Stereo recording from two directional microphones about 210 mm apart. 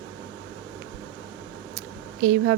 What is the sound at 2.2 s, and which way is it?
Speech, 40° right (ahead or behind).